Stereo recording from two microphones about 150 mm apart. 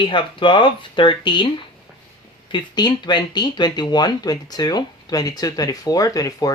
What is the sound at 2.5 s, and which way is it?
Speech, 30° left (ahead or behind).